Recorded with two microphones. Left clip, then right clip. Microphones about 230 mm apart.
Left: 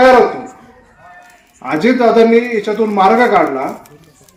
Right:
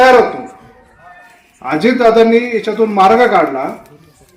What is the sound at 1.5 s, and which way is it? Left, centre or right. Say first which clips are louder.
A man's voice: even; right.